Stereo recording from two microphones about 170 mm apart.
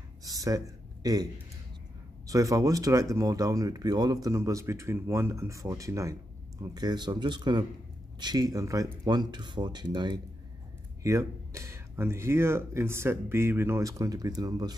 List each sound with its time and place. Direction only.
0.2 s a man's voice: 20° right (ahead or behind)